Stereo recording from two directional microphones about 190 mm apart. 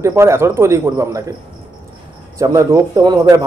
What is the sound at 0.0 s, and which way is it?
Speech, 15° right (ahead or behind).